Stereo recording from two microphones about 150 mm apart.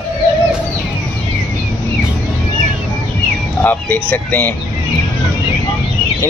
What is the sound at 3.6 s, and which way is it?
Speech, 10° left (ahead or behind).